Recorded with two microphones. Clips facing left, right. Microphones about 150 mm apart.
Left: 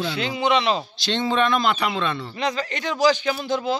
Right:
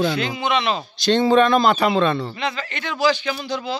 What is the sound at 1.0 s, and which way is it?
Speech, 45° right (ahead or behind).